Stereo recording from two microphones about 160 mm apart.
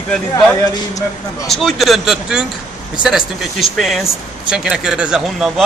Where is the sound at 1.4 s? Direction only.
Centre (ahead or behind).